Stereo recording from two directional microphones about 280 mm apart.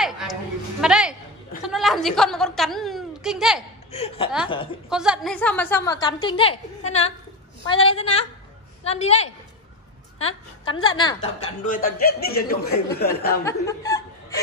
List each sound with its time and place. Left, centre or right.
0.0 s a sound: centre
3.9 s a woman's voice: left
4.8 s a woman's voice: centre
11.6 s speech: left
13.5 s speech: centre